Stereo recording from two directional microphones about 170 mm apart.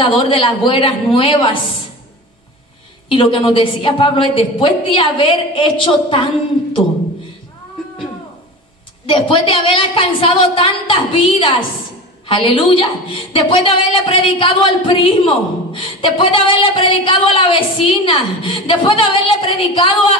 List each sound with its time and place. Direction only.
0.0 s a woman's voice: 30° left (ahead or behind)
3.1 s a woman's voice: 30° left (ahead or behind)
9.0 s a woman's voice: 30° left (ahead or behind)